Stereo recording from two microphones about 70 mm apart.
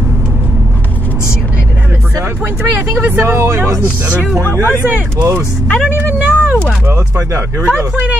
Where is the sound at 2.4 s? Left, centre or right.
Right.